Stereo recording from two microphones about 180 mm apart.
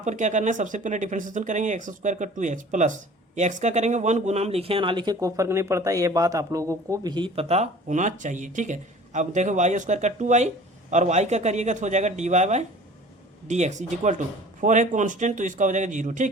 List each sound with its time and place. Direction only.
0.0 s speech: 40° right (ahead or behind)